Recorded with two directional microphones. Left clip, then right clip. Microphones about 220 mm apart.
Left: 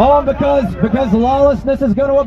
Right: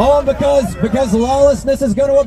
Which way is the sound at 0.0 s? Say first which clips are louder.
Left 1 dB; 15° right (ahead or behind).